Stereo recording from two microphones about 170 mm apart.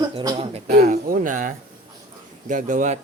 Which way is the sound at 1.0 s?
55° right (ahead or behind).